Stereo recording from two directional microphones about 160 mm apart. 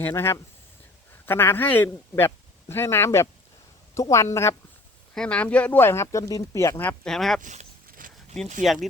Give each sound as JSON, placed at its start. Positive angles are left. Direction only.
{"t": 0.0, "sound": "a woman's voice", "side_deg": 15}
{"t": 5.1, "sound": "speech", "side_deg": 5}
{"t": 7.4, "sound": "speech", "side_deg": -45}
{"t": 7.9, "sound": "a sound", "side_deg": -60}
{"t": 8.6, "sound": "speech", "side_deg": 0}